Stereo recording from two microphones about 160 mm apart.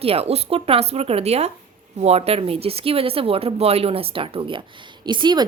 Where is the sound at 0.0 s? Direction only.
40° right (ahead or behind).